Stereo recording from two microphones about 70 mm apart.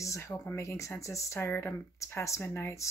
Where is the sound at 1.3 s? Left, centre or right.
Left.